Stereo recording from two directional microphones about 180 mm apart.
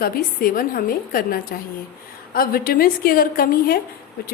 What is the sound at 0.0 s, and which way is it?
A woman's voice, 55° left (ahead or behind).